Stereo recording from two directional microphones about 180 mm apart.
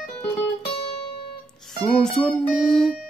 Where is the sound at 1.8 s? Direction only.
Centre (ahead or behind).